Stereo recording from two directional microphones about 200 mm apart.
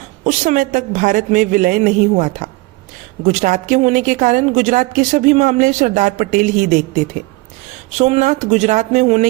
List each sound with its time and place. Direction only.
0.3 s a woman's voice: 40° right (ahead or behind)